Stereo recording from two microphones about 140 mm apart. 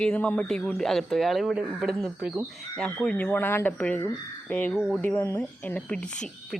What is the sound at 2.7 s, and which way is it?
Speech, 5° left (ahead or behind).